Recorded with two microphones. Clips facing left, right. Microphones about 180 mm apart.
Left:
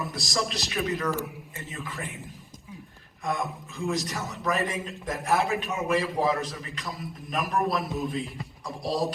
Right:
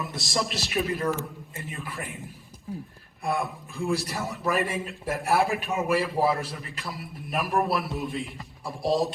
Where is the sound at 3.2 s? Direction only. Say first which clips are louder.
Right 2 dB; 30° right (ahead or behind).